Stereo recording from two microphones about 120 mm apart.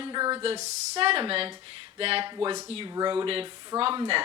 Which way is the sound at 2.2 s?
40° right (ahead or behind).